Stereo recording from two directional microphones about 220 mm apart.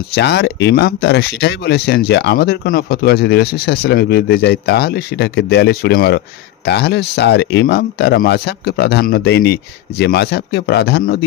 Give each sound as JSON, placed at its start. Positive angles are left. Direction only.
{"t": 0.1, "sound": "speech", "side_deg": 50}